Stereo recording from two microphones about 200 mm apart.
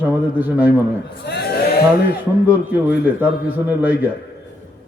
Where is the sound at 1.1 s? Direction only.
55° left (ahead or behind).